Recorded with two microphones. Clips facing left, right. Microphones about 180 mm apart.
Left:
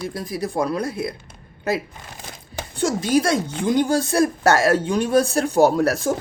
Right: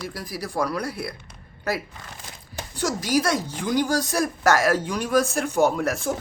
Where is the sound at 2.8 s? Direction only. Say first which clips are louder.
Left 4 dB; 25° left (ahead or behind).